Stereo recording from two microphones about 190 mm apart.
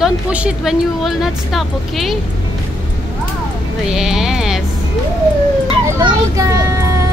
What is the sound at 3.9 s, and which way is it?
Speech, 5° right (ahead or behind).